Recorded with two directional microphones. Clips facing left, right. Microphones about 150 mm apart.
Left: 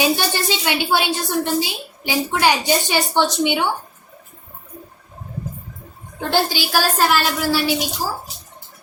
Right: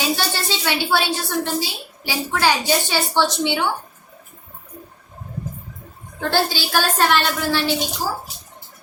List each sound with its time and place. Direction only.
0.0 s a woman's voice: 15° left (ahead or behind)
6.1 s a woman's voice: 15° left (ahead or behind)